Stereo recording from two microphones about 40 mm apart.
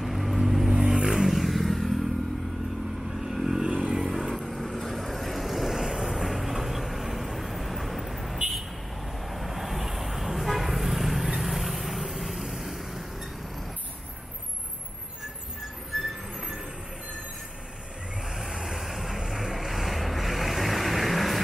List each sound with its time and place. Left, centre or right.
0.0 s vehicle: centre
3.2 s vehicle: centre
3.6 s vehicle: right
4.0 s vehicle: centre
18.3 s vehicle: centre